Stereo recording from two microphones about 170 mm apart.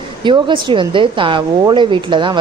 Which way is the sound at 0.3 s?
30° right (ahead or behind).